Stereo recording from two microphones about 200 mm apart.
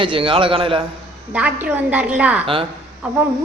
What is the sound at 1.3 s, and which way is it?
A woman's voice, 5° right (ahead or behind).